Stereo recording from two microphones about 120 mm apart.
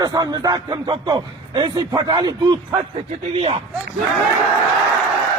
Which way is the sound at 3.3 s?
50° right (ahead or behind).